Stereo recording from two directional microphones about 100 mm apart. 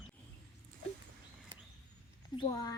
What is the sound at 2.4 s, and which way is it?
Speech, 50° left (ahead or behind).